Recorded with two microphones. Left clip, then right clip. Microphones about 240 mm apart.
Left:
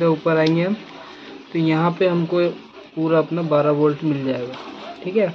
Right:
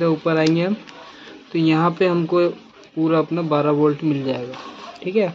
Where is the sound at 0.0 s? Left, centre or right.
Centre.